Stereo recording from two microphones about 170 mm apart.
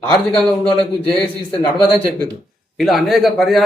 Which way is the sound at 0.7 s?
30° left (ahead or behind).